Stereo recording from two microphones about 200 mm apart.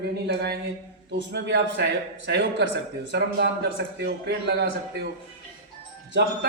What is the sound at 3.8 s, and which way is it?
A man's voice, 60° right (ahead or behind).